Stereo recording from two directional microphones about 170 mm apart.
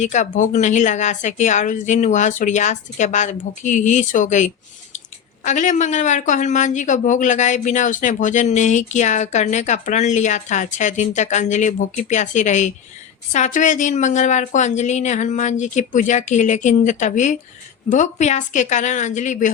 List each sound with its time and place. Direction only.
0.0 s speech: 45° left (ahead or behind)